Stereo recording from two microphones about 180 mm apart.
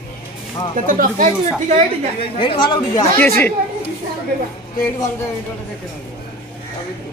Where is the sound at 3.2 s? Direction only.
10° left (ahead or behind).